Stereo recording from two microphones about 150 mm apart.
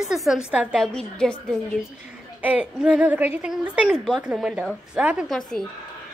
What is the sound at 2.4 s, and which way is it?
A woman's voice, 10° right (ahead or behind).